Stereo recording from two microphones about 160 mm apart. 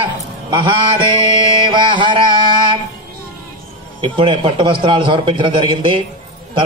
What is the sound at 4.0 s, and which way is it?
Mantra, 30° right (ahead or behind).